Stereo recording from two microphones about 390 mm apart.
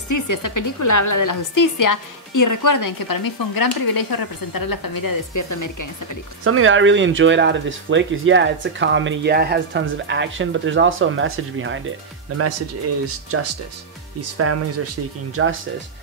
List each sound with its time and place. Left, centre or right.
0.1 s a woman's voice: left
6.4 s speech: right
13.0 s speech: right